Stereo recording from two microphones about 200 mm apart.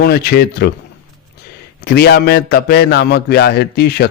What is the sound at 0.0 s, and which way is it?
Speech, 50° left (ahead or behind).